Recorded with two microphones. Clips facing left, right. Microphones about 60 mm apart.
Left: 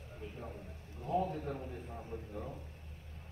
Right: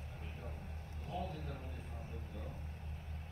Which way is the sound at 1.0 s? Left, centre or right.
Left.